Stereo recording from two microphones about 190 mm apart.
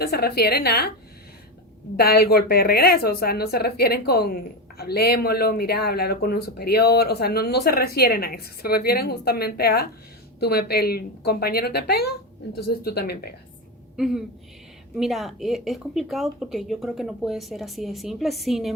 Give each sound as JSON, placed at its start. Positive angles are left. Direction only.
{"t": 0.0, "sound": "speech", "side_deg": 55}
{"t": 2.0, "sound": "speech", "side_deg": 55}
{"t": 13.9, "sound": "speech", "side_deg": 0}